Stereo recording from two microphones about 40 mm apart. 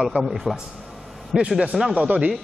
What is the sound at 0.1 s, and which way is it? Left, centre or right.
A man's voice, centre.